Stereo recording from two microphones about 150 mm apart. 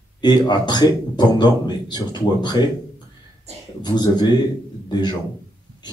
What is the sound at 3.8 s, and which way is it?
A man's voice, 30° left (ahead or behind).